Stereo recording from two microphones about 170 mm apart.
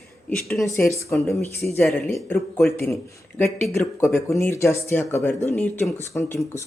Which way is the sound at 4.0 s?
15° left (ahead or behind).